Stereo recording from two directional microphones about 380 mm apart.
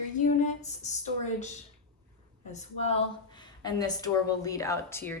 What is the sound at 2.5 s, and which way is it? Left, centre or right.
A woman's voice, centre.